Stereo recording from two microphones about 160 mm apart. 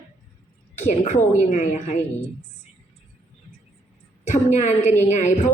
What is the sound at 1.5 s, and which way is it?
Speech, 45° left (ahead or behind).